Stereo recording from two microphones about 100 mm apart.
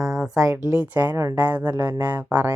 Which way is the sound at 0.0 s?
5° right (ahead or behind).